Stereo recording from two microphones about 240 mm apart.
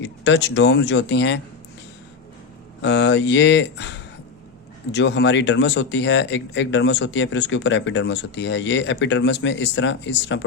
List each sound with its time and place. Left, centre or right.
0.0 s speech: left
2.8 s speech: left
4.9 s speech: left